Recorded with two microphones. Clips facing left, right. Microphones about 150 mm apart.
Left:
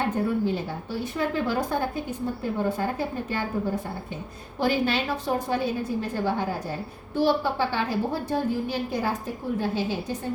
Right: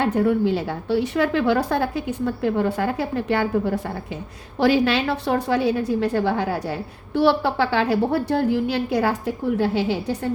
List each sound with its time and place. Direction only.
0.0 s a woman's voice: 75° right (ahead or behind)